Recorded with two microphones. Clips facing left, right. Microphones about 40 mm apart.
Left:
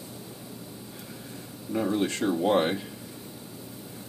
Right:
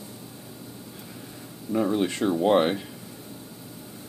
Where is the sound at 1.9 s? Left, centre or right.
Centre.